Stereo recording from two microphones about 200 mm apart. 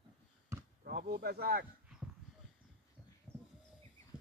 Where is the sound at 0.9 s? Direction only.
50° right (ahead or behind).